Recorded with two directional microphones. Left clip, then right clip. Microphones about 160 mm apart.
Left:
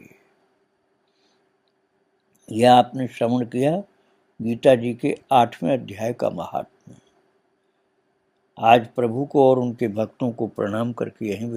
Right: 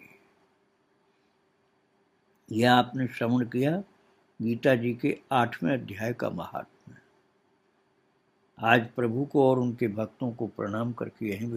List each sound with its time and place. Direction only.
2.5 s speech: 25° left (ahead or behind)
8.5 s speech: 30° left (ahead or behind)